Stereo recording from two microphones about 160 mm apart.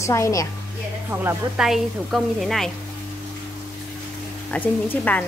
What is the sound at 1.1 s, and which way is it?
Speech, 15° right (ahead or behind).